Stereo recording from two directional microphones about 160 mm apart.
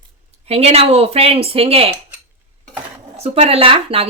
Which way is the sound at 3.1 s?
40° right (ahead or behind).